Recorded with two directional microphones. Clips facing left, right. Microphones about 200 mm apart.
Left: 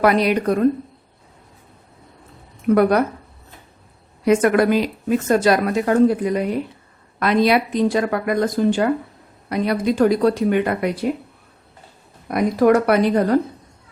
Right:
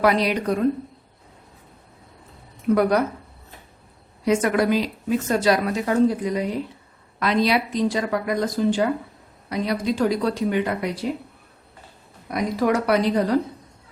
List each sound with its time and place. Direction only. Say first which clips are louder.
0.0 s a woman's voice: left 3 dB; 55° left (ahead or behind)
4.3 s a woman's voice: left 4 dB; 55° left (ahead or behind)
12.3 s a woman's voice: left 6 dB; 55° left (ahead or behind)